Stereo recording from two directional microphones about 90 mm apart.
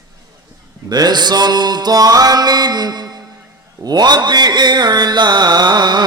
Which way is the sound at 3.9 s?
50° right (ahead or behind).